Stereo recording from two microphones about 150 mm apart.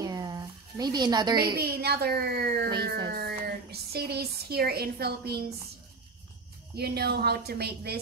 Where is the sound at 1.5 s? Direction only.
90° right.